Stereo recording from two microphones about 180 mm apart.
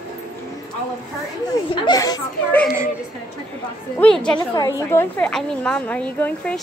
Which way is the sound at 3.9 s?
5° left (ahead or behind).